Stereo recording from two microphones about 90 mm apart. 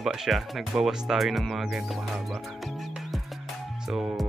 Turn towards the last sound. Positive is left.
turn(degrees=-5)  # may be behind; listen again after turning